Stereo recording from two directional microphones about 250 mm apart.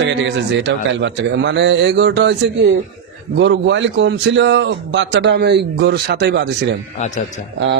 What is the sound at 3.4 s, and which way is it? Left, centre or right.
A man's voice, right.